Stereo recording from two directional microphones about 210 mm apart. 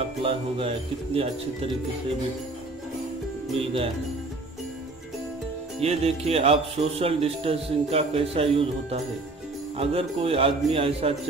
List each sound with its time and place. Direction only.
0.2 s speech: 25° right (ahead or behind)
3.5 s speech: 25° right (ahead or behind)
5.8 s speech: 30° right (ahead or behind)